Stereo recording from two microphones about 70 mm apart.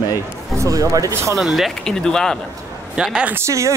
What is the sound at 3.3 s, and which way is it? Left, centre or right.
Speech, right.